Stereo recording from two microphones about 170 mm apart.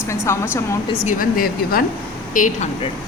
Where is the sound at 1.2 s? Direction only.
60° left (ahead or behind).